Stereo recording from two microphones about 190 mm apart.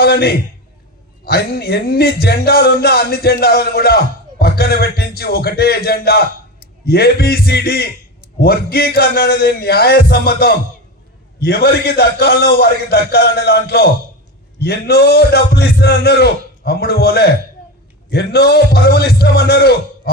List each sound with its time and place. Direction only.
0.0 s speech: 55° left (ahead or behind)